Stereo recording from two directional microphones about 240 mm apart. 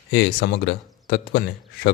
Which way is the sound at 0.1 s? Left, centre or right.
Left.